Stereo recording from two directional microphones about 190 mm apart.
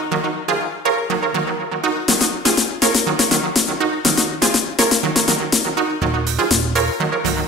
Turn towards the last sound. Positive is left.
turn(degrees=0)  # may be behind; listen again after turning